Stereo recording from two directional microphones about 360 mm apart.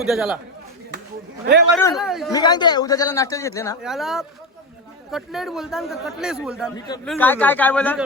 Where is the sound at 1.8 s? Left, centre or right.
Centre.